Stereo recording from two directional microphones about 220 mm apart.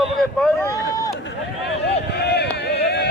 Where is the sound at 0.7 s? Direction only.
15° left (ahead or behind).